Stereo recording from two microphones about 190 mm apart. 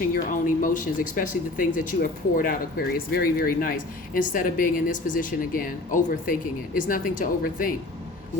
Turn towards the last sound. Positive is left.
turn(degrees=45)  # may be behind; listen again after turning